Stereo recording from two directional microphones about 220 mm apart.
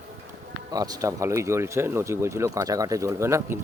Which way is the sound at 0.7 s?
15° right (ahead or behind).